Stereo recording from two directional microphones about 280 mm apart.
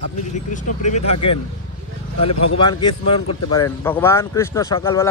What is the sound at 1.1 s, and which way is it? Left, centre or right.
Speech, left.